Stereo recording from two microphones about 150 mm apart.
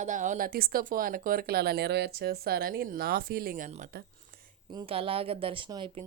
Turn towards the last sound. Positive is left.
turn(degrees=-35)  # may be behind; listen again after turning